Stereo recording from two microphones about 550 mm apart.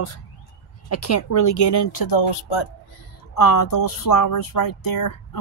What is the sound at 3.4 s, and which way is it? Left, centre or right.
Speech, left.